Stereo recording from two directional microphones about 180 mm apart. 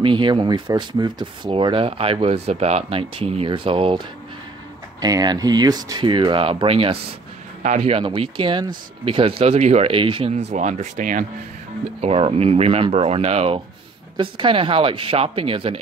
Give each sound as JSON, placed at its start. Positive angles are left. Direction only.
{"t": 0.0, "sound": "speech", "side_deg": -25}
{"t": 5.0, "sound": "speech", "side_deg": -20}
{"t": 12.0, "sound": "speech", "side_deg": -35}